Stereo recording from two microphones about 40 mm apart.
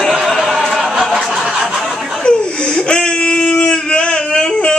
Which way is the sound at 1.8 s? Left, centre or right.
Centre.